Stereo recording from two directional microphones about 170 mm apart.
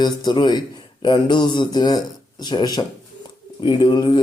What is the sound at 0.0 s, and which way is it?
Speech, 25° left (ahead or behind).